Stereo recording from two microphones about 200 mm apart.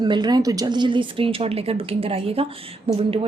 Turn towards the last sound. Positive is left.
turn(degrees=-30)  # may be behind; listen again after turning